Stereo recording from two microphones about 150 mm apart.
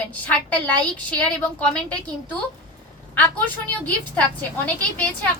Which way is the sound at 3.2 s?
10° left (ahead or behind).